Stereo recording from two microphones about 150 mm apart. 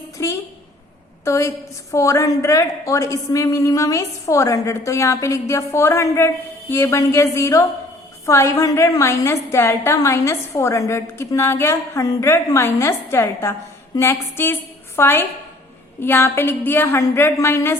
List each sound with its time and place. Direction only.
0.2 s a woman's voice: 20° left (ahead or behind)